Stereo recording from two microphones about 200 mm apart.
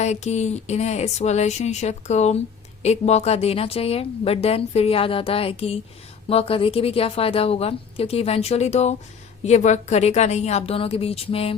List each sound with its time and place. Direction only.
0.0 s a woman's voice: 35° left (ahead or behind)